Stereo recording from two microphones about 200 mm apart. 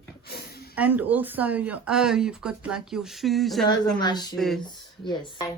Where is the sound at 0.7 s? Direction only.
10° right (ahead or behind).